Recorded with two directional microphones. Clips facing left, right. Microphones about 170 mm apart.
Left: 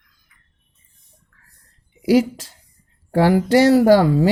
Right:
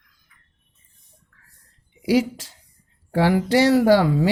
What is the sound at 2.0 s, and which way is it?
Speech, 45° left (ahead or behind).